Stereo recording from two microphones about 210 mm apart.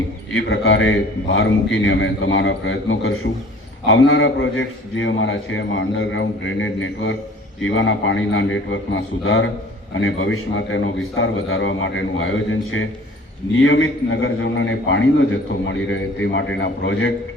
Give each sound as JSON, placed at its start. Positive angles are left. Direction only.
{"t": 0.3, "sound": "a man's voice", "side_deg": 60}